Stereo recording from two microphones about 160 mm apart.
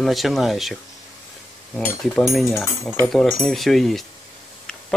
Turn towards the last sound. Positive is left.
turn(degrees=0)  # may be behind; listen again after turning